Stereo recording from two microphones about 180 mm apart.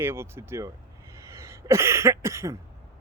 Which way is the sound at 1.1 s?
15° right (ahead or behind).